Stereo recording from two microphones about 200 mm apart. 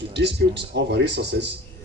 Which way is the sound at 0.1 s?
60° right (ahead or behind).